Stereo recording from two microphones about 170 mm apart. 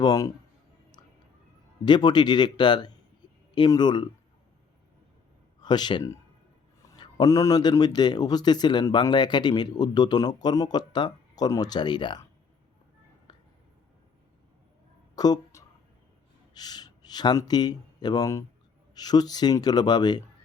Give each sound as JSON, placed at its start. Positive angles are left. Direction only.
{"t": 0.0, "sound": "speech", "side_deg": 20}
{"t": 1.8, "sound": "speech", "side_deg": 25}
{"t": 5.6, "sound": "speech", "side_deg": 25}
{"t": 13.3, "sound": "a sound", "side_deg": 25}
{"t": 15.1, "sound": "a sound", "side_deg": 20}
{"t": 16.6, "sound": "speech", "side_deg": 25}